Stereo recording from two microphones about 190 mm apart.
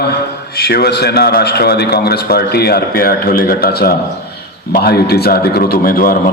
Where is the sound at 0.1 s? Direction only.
55° left (ahead or behind).